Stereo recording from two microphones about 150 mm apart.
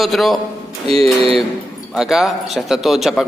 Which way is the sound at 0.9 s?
40° right (ahead or behind).